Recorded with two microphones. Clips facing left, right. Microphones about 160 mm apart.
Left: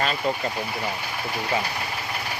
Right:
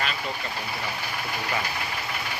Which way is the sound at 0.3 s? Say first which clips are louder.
Left 8 dB; 40° left (ahead or behind).